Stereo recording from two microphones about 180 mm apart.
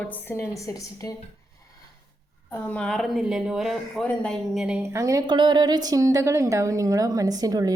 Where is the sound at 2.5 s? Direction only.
5° left (ahead or behind).